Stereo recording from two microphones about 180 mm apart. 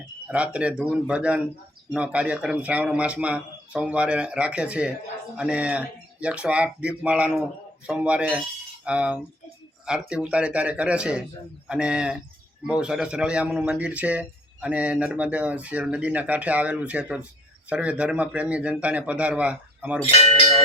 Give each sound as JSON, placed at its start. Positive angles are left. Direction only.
{"t": 0.3, "sound": "a man's voice", "side_deg": -5}
{"t": 20.0, "sound": "speech", "side_deg": 35}